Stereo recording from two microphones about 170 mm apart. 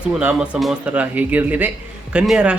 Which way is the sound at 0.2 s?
10° right (ahead or behind).